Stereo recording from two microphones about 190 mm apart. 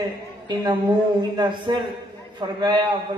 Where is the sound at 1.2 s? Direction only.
25° right (ahead or behind).